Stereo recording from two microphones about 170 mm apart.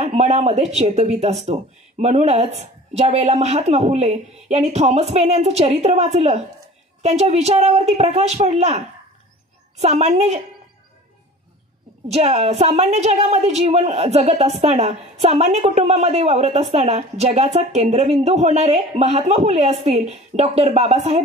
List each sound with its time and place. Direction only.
0.0 s a woman's voice: 40° right (ahead or behind)
12.1 s a woman's voice: 40° right (ahead or behind)